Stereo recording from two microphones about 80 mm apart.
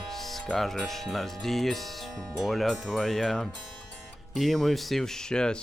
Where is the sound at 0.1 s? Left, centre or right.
Centre.